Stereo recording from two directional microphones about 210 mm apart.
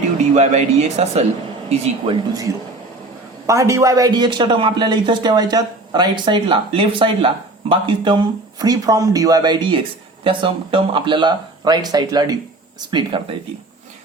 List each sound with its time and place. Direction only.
0.3 s a man's voice: 30° right (ahead or behind)
3.4 s a man's voice: 15° right (ahead or behind)